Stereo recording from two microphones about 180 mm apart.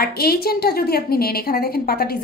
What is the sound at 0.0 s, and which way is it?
A woman's voice, 60° left (ahead or behind).